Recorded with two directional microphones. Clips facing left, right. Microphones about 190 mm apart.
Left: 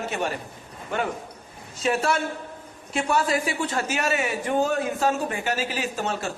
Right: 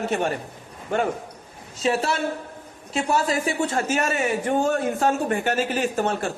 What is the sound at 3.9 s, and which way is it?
A man's voice, 45° right (ahead or behind).